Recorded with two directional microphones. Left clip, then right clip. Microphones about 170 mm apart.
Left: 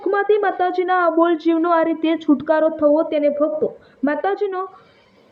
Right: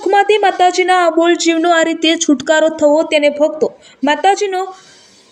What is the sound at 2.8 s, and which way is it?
Speech, 55° right (ahead or behind).